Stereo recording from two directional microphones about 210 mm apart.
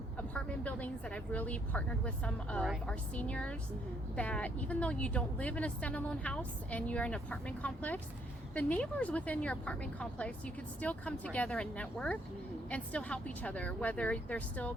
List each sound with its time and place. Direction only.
0.2 s a woman's voice: 5° left (ahead or behind)